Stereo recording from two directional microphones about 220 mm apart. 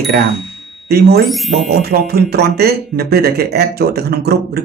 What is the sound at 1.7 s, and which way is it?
Speech, 45° right (ahead or behind).